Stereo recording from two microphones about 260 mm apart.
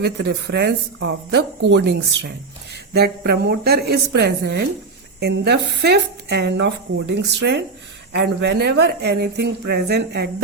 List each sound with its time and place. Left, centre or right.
0.0 s speech: right